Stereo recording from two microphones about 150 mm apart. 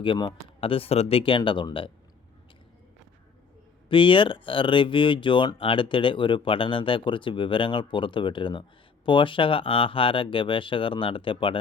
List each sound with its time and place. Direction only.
0.0 s speech: 35° left (ahead or behind)
3.8 s speech: 35° left (ahead or behind)